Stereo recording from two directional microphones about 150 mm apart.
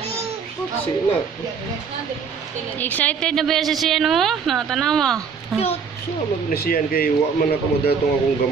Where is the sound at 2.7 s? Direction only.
10° left (ahead or behind).